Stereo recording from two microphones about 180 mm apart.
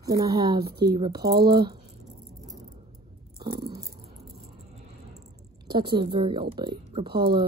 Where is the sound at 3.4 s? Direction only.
25° right (ahead or behind).